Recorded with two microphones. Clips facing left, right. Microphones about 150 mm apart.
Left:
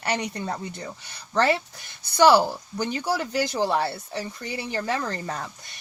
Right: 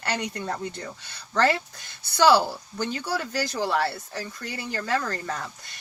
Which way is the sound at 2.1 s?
15° left (ahead or behind).